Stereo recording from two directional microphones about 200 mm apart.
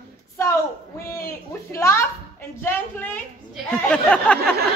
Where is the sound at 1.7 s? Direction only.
15° left (ahead or behind).